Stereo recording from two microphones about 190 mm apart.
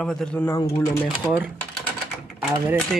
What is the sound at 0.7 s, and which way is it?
Speech, 20° left (ahead or behind).